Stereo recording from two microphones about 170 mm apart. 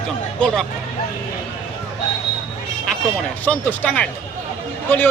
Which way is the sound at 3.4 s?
10° left (ahead or behind).